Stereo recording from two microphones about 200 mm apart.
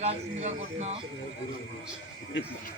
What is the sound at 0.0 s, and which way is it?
Speech, 35° right (ahead or behind).